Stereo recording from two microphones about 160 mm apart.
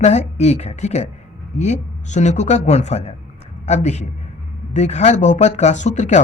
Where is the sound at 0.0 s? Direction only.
45° left (ahead or behind).